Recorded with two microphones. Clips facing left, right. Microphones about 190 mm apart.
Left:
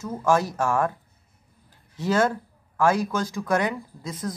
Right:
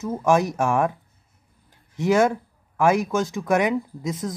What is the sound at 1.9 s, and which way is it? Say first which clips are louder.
Speech: right 4 dB; 20° right (ahead or behind).